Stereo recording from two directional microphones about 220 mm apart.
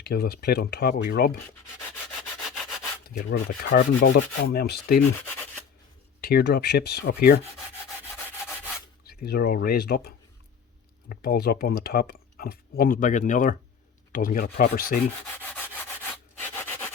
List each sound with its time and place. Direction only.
0.0 s speech: 45° left (ahead or behind)
2.4 s rub: centre (ahead or behind)
3.7 s rub: 55° left (ahead or behind)
4.5 s speech: 45° left (ahead or behind)
5.2 s rub: 10° left (ahead or behind)
6.2 s speech: 45° left (ahead or behind)
9.0 s speech: 45° left (ahead or behind)
11.1 s speech: 45° left (ahead or behind)
14.1 s rub: 40° left (ahead or behind)
15.4 s rub: 10° left (ahead or behind)